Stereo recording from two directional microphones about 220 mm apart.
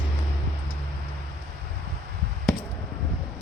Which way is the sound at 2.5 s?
Centre (ahead or behind).